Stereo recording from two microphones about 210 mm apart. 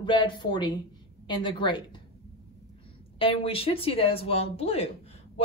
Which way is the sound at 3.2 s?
25° left (ahead or behind).